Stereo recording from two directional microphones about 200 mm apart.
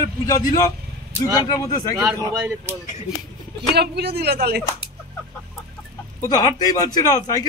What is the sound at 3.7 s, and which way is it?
Speech, 55° right (ahead or behind).